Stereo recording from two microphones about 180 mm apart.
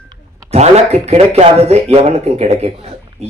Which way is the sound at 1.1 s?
35° right (ahead or behind).